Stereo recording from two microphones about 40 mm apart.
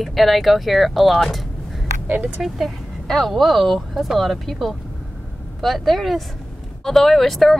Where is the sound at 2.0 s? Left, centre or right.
Right.